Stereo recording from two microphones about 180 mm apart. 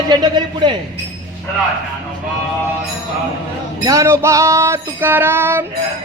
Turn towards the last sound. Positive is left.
turn(degrees=-10)  # may be behind; listen again after turning